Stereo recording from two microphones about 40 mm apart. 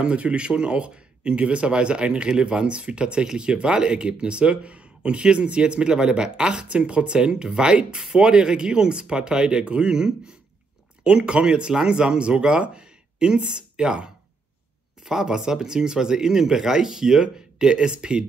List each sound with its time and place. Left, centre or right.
0.0 s speech: right